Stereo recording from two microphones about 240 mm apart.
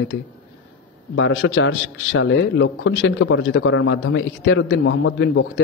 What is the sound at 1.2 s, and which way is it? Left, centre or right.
A man's voice, left.